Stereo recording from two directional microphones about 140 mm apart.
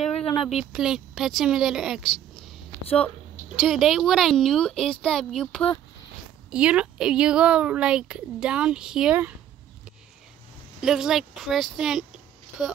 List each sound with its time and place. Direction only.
0.2 s a sound: 40° left (ahead or behind)
0.5 s a woman's voice: 5° right (ahead or behind)
3.6 s a woman's voice: centre (ahead or behind)
6.5 s speech: 10° right (ahead or behind)
10.8 s a woman's voice: 5° right (ahead or behind)